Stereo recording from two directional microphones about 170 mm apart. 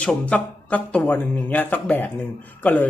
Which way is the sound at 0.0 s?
5° left (ahead or behind).